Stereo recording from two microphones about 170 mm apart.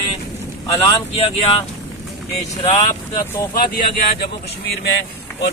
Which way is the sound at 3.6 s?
60° left (ahead or behind).